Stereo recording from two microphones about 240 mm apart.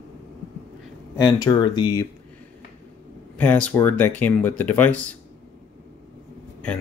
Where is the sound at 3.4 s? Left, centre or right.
Centre.